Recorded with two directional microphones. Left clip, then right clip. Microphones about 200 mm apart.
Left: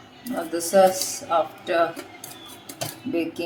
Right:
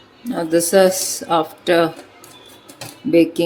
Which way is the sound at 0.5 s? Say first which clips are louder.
Right 4 dB; 40° right (ahead or behind).